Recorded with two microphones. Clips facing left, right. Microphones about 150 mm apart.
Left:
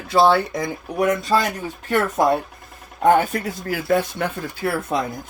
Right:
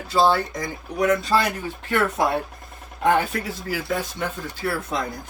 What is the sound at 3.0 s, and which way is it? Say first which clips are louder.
Speech: left 4 dB; 45° left (ahead or behind).